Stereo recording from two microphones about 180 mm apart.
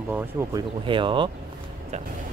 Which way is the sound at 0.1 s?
15° right (ahead or behind).